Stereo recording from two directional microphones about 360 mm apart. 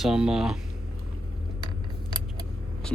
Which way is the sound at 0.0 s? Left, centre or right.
Centre.